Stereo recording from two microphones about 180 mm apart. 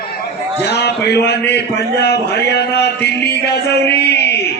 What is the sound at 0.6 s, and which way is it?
Male singing, 65° left (ahead or behind).